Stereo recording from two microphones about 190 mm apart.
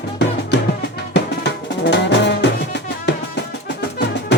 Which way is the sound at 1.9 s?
65° left (ahead or behind).